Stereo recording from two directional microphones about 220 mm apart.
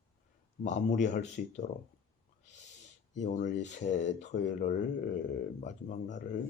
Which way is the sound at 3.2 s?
35° left (ahead or behind).